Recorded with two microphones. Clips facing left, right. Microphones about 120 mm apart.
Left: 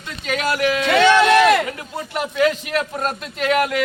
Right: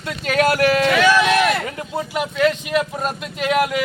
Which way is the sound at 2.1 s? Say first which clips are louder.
Left 1 dB; centre (ahead or behind).